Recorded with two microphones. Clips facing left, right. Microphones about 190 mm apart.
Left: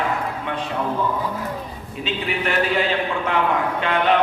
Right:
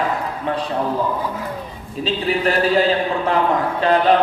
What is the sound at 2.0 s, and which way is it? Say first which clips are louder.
A man's voice: right 5 dB; 35° right (ahead or behind).